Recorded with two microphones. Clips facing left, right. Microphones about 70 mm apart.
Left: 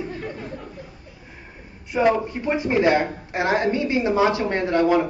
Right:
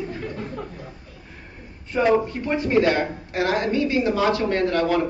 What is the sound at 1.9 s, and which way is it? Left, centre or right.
A woman's voice, centre.